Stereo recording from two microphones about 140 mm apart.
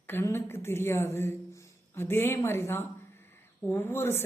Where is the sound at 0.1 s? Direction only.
15° left (ahead or behind).